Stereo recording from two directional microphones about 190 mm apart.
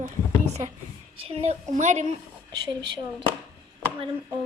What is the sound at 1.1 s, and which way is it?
A woman's voice, 35° right (ahead or behind).